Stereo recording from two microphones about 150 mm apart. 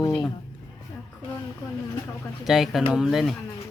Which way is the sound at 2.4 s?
Centre (ahead or behind).